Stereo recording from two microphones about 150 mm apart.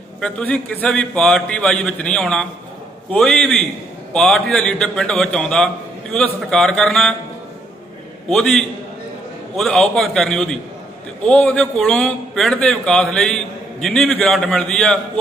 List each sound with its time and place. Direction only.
0.2 s a man's voice: 10° left (ahead or behind)
8.3 s a man's voice: 5° left (ahead or behind)